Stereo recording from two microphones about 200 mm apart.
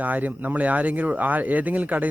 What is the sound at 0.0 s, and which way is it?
A man's voice, 10° right (ahead or behind).